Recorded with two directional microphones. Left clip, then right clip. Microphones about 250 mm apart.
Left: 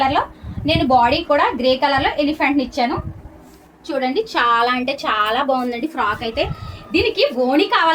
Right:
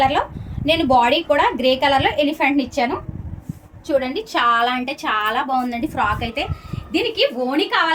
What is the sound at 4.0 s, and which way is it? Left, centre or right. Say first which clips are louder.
A woman's voice: left 2 dB; right.